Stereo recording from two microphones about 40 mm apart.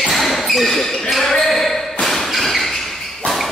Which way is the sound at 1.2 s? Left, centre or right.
Centre.